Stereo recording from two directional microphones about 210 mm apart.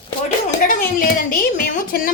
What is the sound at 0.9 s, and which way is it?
A woman's voice, 40° left (ahead or behind).